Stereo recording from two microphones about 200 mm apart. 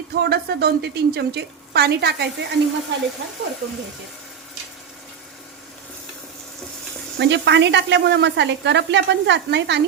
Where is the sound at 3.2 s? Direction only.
65° right (ahead or behind).